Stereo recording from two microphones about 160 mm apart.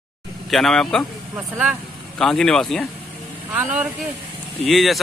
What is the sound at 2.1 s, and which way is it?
Speech, 5° left (ahead or behind).